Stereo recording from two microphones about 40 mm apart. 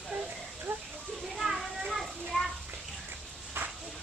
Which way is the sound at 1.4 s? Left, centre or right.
Centre.